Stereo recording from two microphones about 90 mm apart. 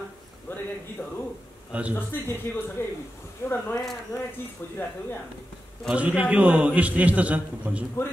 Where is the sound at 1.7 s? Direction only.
15° right (ahead or behind).